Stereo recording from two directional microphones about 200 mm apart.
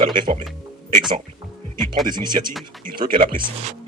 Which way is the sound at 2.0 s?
20° right (ahead or behind).